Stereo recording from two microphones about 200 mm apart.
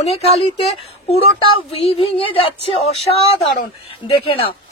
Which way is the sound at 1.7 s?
30° left (ahead or behind).